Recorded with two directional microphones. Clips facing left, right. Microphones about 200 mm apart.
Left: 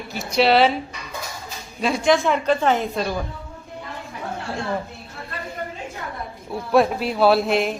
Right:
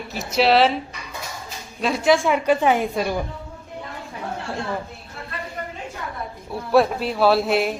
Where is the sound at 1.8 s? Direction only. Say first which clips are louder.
Even; centre (ahead or behind).